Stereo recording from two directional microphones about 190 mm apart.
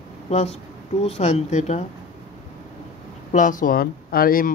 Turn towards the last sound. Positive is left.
turn(degrees=50)  # may be behind; listen again after turning